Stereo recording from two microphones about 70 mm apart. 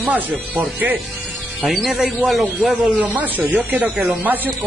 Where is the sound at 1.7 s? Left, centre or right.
Centre.